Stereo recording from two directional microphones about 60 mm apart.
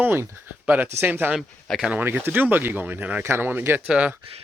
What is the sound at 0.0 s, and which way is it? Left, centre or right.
Speech, right.